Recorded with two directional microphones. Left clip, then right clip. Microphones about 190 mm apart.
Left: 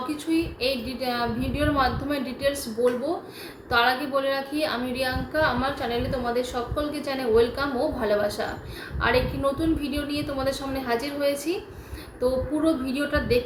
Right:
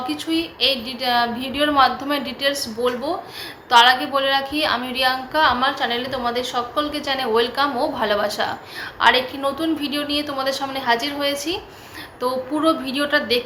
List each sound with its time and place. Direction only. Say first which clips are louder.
0.1 s a woman's voice: right 3 dB; 15° left (ahead or behind)